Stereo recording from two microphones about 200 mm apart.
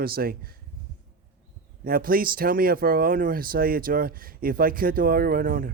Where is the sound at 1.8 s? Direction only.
45° right (ahead or behind).